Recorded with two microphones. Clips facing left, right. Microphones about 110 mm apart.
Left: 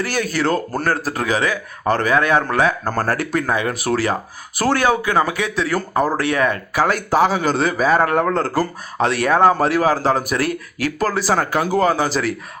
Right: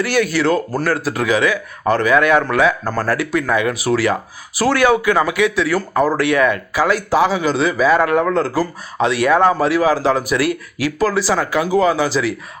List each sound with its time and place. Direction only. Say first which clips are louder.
0.0 s a man's voice: right 4 dB; 40° left (ahead or behind)
3.4 s a man's voice: right 3 dB; 35° left (ahead or behind)
3.8 s a man's voice: right 3 dB; 55° left (ahead or behind)